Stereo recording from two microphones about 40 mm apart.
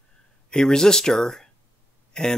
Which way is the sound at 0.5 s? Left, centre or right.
Centre.